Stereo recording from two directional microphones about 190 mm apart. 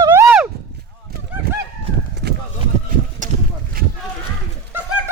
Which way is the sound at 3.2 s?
45° right (ahead or behind).